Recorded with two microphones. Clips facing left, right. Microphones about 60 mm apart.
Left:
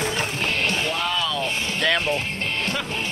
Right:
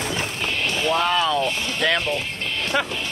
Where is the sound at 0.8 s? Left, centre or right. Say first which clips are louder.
Right 5 dB; right.